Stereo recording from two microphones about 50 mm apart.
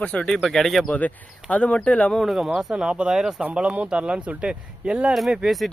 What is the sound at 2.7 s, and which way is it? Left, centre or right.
Speech, centre.